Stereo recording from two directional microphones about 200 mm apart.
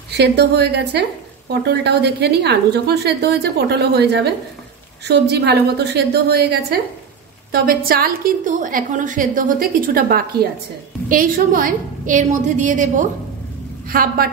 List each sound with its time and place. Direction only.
0.1 s a woman's voice: 55° right (ahead or behind)